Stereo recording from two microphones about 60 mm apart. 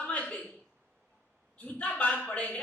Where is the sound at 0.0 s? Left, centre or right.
Left.